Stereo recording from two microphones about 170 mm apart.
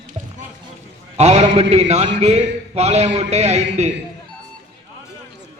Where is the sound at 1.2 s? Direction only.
40° right (ahead or behind).